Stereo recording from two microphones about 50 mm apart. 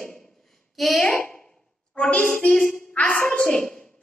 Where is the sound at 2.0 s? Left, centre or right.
Left.